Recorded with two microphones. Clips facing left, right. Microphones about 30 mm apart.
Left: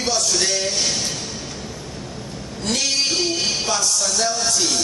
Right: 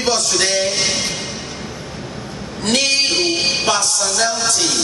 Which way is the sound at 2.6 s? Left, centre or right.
Right.